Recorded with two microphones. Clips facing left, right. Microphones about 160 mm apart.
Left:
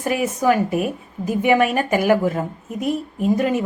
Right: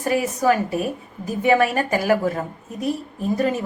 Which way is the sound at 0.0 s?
20° left (ahead or behind).